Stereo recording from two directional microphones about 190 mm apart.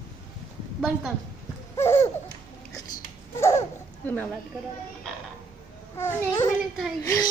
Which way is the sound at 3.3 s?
15° left (ahead or behind).